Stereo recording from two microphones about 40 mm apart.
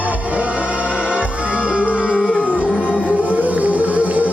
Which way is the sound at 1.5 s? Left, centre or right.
Right.